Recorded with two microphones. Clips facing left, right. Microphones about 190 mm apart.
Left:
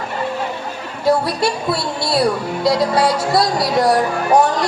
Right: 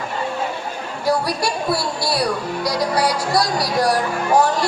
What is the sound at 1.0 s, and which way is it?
Speech, 25° left (ahead or behind).